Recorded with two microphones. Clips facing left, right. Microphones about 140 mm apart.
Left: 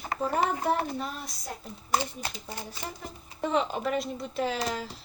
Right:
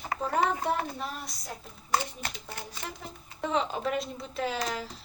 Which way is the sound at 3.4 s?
Centre (ahead or behind).